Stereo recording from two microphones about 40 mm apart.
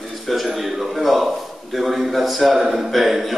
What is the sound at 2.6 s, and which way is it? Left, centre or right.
Speech, centre.